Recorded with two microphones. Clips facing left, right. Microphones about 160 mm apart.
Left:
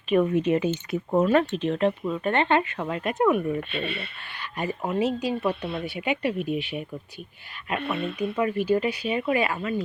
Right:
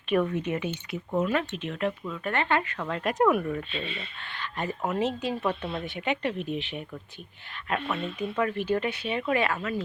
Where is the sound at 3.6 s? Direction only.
65° left (ahead or behind).